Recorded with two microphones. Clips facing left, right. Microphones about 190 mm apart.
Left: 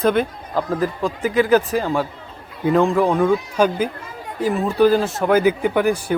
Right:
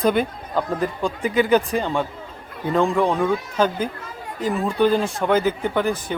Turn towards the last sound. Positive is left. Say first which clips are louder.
# left 4 dB
turn(degrees=10)  # may be behind; listen again after turning